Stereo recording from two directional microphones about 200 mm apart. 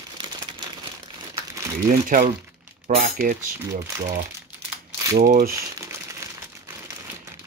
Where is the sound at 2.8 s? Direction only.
45° right (ahead or behind).